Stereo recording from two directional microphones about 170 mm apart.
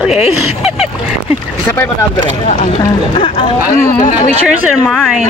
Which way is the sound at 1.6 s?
10° left (ahead or behind).